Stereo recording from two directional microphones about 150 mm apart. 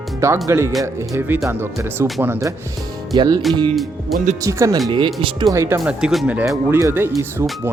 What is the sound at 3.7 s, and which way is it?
Speech, centre (ahead or behind).